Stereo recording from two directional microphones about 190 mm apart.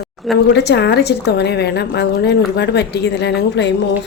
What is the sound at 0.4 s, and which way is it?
A woman's voice, 60° left (ahead or behind).